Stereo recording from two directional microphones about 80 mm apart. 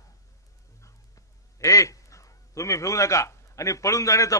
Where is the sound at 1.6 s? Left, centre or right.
Left.